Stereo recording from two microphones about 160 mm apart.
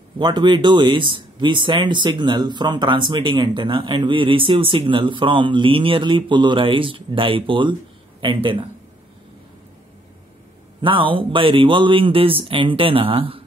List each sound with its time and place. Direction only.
0.2 s speech: 30° right (ahead or behind)
10.8 s speech: 30° right (ahead or behind)